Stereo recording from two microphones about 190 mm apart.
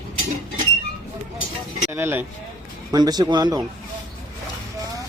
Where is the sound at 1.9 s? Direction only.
10° right (ahead or behind).